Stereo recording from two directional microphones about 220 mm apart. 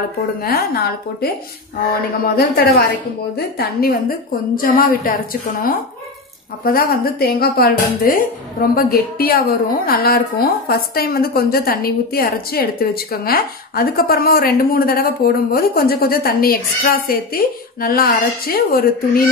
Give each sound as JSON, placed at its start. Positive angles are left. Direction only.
{"t": 0.4, "sound": "a woman's voice", "side_deg": 45}
{"t": 2.3, "sound": "a woman's voice", "side_deg": 45}